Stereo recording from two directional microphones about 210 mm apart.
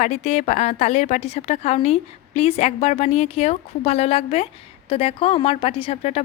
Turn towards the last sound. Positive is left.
turn(degrees=30)  # may be behind; listen again after turning